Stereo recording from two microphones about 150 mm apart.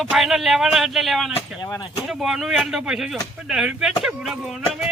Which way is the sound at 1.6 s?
30° left (ahead or behind).